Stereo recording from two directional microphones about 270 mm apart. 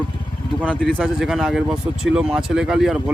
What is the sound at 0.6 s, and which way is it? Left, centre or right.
Speech, centre.